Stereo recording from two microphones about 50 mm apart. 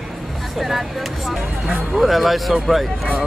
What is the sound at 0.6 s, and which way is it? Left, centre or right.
Speech, centre.